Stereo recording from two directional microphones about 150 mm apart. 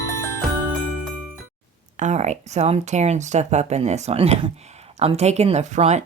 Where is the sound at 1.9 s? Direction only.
50° right (ahead or behind).